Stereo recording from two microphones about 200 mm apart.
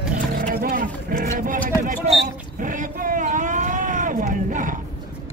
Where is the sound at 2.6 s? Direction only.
40° right (ahead or behind).